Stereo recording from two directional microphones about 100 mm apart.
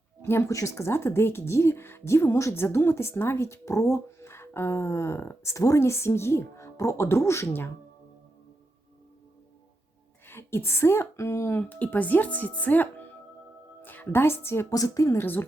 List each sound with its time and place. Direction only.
0.2 s speech: 25° left (ahead or behind)
10.2 s speech: 25° left (ahead or behind)
11.6 s speech: 15° left (ahead or behind)
14.7 s a woman's voice: 35° left (ahead or behind)
15.2 s speech: 20° left (ahead or behind)